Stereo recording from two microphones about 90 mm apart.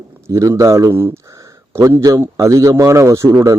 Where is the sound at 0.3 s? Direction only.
35° right (ahead or behind).